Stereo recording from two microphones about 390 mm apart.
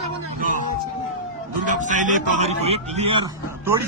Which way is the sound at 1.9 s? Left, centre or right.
Centre.